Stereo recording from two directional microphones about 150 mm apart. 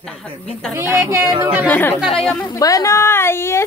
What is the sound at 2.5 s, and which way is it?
A woman's voice, 20° left (ahead or behind).